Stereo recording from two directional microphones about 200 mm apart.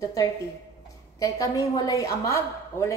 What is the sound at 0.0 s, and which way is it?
A woman's voice, 15° left (ahead or behind).